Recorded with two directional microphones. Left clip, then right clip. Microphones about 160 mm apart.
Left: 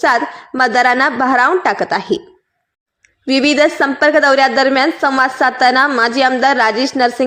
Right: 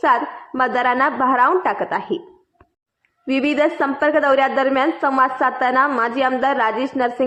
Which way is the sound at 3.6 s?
30° left (ahead or behind).